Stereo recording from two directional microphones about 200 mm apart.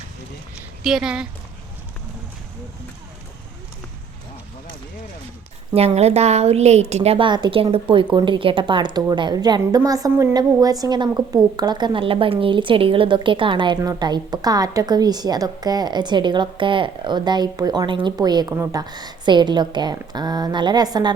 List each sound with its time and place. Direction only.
0.8 s speech: centre (ahead or behind)
5.7 s a woman's voice: 30° right (ahead or behind)